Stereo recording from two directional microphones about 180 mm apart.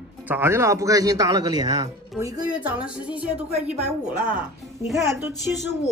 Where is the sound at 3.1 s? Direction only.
5° right (ahead or behind).